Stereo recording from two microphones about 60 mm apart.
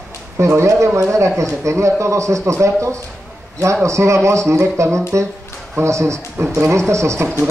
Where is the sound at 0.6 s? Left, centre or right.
Right.